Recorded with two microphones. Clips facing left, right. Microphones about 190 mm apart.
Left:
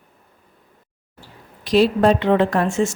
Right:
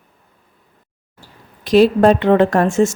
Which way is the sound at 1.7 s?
50° right (ahead or behind).